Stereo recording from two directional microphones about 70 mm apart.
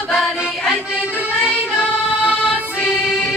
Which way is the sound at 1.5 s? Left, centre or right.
Centre.